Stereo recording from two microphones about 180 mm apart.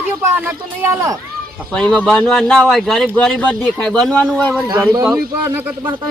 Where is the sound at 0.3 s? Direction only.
10° right (ahead or behind).